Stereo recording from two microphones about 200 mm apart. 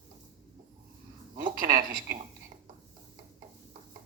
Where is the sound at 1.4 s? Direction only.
45° right (ahead or behind).